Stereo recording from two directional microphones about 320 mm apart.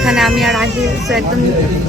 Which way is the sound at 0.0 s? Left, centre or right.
Centre.